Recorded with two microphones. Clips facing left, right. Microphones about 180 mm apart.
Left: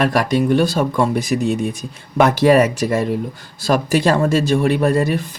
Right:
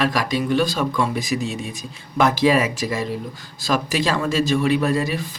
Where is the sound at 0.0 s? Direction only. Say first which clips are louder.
Left 5 dB; 55° left (ahead or behind).